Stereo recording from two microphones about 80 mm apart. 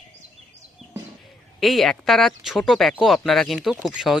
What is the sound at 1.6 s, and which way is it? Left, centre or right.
Speech, centre.